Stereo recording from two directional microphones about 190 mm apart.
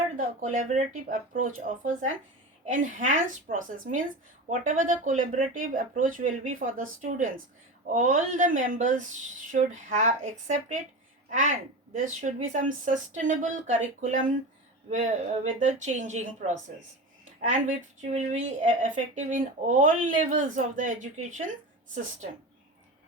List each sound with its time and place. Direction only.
0.4 s a woman's voice: 40° right (ahead or behind)
17.5 s speech: 40° right (ahead or behind)